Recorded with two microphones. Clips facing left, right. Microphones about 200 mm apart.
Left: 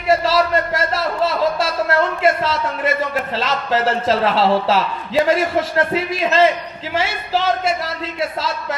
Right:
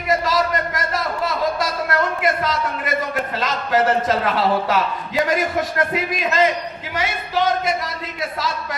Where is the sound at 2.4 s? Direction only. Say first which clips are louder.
Left 3 dB; 30° left (ahead or behind).